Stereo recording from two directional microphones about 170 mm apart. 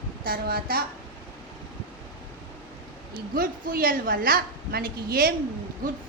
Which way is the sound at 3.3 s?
60° right (ahead or behind).